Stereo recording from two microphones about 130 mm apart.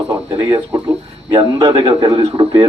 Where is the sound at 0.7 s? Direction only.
25° right (ahead or behind).